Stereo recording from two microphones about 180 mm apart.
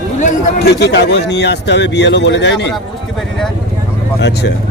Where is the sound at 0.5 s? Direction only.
65° left (ahead or behind).